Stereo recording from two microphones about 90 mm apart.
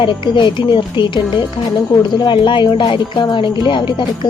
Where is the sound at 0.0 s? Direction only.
60° left (ahead or behind).